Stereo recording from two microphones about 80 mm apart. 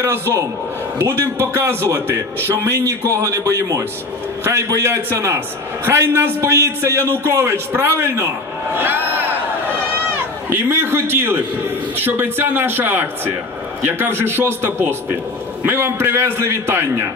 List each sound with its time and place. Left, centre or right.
0.0 s a man's voice: right
10.5 s a man's voice: right